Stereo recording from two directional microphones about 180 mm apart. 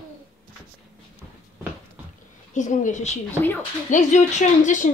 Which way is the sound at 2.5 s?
45° left (ahead or behind).